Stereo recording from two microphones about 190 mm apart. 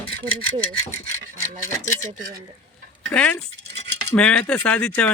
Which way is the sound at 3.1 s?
5° left (ahead or behind).